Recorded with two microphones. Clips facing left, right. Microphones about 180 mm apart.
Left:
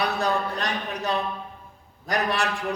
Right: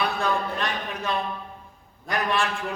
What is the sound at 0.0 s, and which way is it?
A man's voice, 40° left (ahead or behind).